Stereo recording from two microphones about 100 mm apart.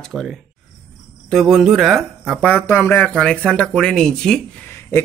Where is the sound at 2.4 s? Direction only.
20° left (ahead or behind).